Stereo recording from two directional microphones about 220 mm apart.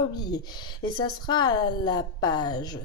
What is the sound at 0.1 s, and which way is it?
Speech, 20° left (ahead or behind).